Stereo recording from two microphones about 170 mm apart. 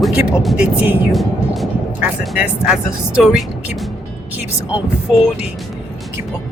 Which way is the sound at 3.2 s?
Centre (ahead or behind).